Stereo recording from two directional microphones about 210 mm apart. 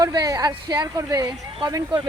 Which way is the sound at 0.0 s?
20° right (ahead or behind).